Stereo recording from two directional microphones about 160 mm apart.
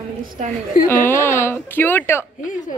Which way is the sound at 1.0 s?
15° left (ahead or behind).